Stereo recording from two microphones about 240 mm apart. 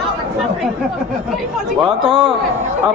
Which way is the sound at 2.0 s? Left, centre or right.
Right.